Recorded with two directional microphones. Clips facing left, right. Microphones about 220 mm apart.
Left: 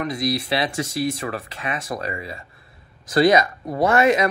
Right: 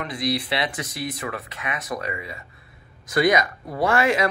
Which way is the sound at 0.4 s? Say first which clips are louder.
Left 3 dB; 25° left (ahead or behind).